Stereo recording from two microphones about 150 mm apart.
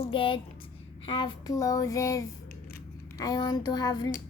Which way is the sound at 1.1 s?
30° left (ahead or behind).